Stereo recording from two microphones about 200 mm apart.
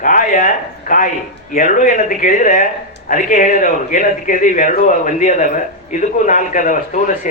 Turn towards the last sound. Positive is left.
turn(degrees=40)  # may be behind; listen again after turning